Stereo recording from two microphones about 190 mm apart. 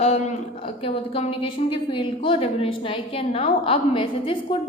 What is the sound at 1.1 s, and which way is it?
A woman's voice, 30° left (ahead or behind).